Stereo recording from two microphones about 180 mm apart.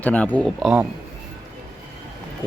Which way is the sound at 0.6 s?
5° right (ahead or behind).